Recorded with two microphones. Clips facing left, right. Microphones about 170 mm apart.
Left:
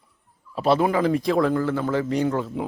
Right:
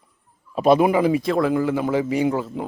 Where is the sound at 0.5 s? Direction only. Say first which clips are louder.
Right 4 dB; 15° right (ahead or behind).